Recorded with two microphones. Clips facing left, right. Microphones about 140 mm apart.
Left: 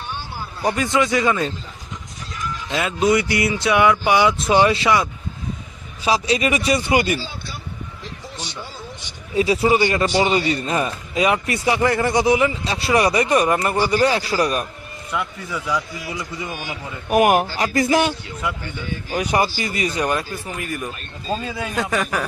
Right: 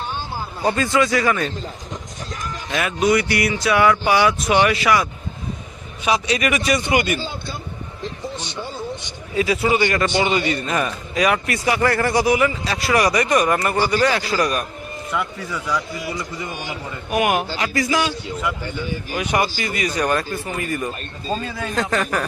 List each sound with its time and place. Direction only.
0.6 s speech: 15° left (ahead or behind)
2.6 s speech: 25° left (ahead or behind)
6.1 s speech: 30° left (ahead or behind)
9.3 s a man's voice: 30° left (ahead or behind)
15.1 s a man's voice: centre (ahead or behind)
17.1 s speech: 45° left (ahead or behind)
19.1 s a man's voice: 35° left (ahead or behind)
20.1 s speech: 10° left (ahead or behind)